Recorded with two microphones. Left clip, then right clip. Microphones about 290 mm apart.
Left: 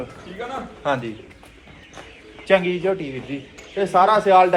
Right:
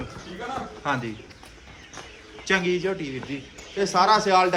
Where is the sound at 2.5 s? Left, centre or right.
Centre.